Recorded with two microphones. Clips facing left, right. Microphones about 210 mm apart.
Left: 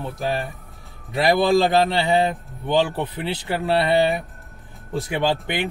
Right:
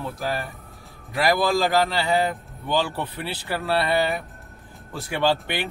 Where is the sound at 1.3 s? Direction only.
20° left (ahead or behind).